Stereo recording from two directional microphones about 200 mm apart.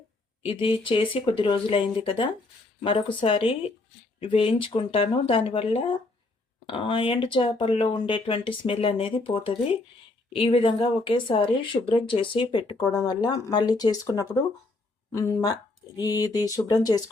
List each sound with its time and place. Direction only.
0.4 s speech: 25° left (ahead or behind)
12.7 s speech: 5° left (ahead or behind)
13.5 s speech: 20° left (ahead or behind)